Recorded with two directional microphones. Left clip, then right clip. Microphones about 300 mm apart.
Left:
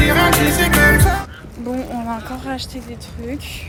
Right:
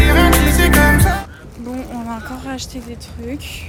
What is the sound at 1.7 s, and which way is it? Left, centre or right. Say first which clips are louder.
Vehicle: left 2 dB; centre.